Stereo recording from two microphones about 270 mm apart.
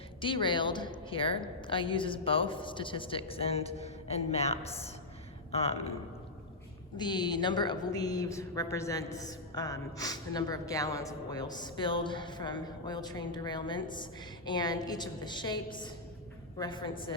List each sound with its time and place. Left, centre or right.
0.2 s a woman's voice: centre
6.9 s a woman's voice: centre